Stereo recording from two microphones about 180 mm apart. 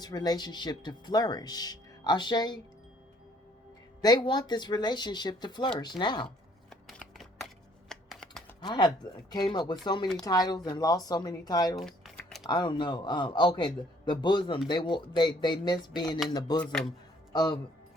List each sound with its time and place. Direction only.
0.0 s speech: 20° left (ahead or behind)
4.0 s speech: 25° left (ahead or behind)
6.7 s a sound: centre (ahead or behind)
7.9 s computer keyboard: centre (ahead or behind)
8.6 s speech: 25° left (ahead or behind)
11.8 s typing: centre (ahead or behind)
12.4 s speech: 25° left (ahead or behind)